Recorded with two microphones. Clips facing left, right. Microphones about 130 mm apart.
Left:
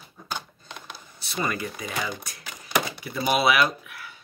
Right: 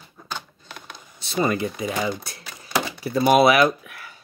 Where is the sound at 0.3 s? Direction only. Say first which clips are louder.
Even; 15° left (ahead or behind).